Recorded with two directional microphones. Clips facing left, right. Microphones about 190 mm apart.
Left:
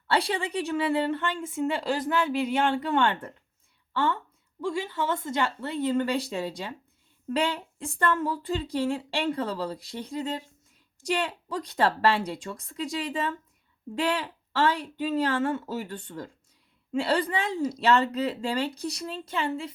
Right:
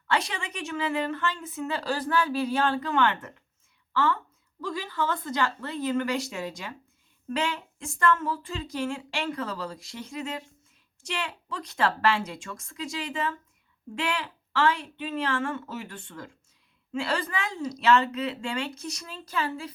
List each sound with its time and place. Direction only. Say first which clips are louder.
0.1 s a woman's voice: left 3 dB; 35° left (ahead or behind)